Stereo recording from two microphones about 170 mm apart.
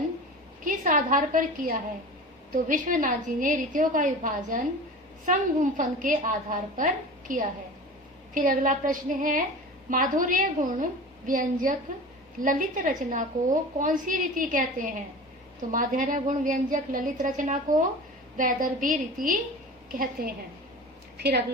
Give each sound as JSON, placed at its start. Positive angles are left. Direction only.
{"t": 0.6, "sound": "a woman's voice", "side_deg": -50}
{"t": 21.2, "sound": "a woman's voice", "side_deg": -70}